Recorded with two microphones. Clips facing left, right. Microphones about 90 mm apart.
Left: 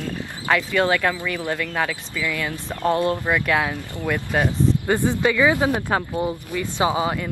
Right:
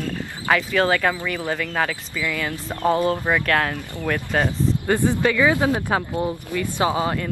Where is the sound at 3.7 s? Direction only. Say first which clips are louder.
Even; 15° left (ahead or behind).